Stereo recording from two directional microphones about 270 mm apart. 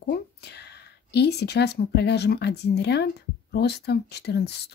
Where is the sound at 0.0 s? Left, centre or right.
Left.